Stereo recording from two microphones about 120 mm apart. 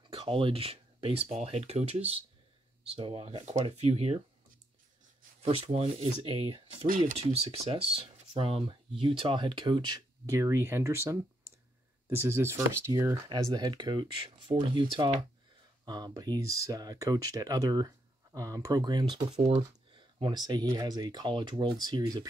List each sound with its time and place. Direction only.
0.1 s speech: 45° right (ahead or behind)
5.4 s speech: 55° right (ahead or behind); by 10.0 s 40° right (ahead or behind)
10.2 s speech: 25° right (ahead or behind)